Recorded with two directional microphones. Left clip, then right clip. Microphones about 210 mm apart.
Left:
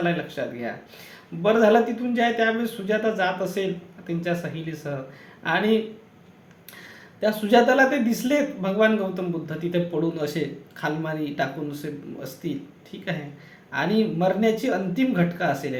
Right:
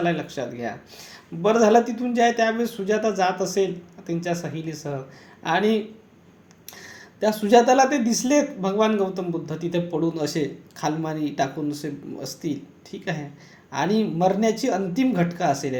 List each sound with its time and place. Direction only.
0.0 s speech: 40° right (ahead or behind)
7.2 s speech: 40° right (ahead or behind)